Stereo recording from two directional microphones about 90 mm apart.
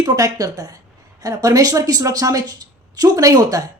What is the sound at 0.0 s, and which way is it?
Speech, 40° right (ahead or behind).